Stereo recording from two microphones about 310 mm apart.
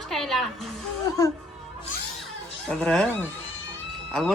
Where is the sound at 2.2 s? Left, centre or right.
Centre.